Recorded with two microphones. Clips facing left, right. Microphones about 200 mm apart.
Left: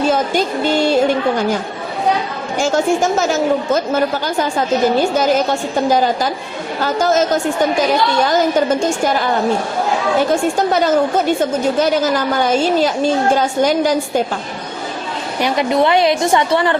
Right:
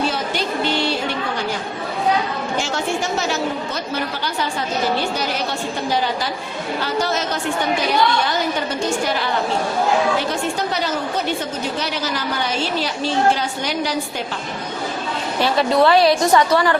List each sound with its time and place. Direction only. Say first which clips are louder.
0.1 s a woman's voice: left 7 dB; 45° left (ahead or behind)
2.6 s a woman's voice: left 10 dB; 45° left (ahead or behind)
10.7 s a woman's voice: left 9 dB; 50° left (ahead or behind)
15.4 s a woman's voice: left 1 dB; 15° left (ahead or behind)